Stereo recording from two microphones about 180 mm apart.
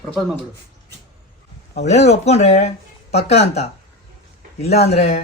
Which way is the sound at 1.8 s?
35° left (ahead or behind).